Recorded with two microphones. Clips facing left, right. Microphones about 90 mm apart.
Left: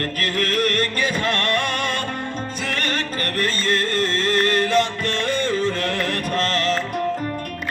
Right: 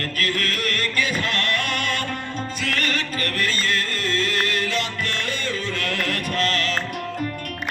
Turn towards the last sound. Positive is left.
turn(degrees=35)  # may be behind; listen again after turning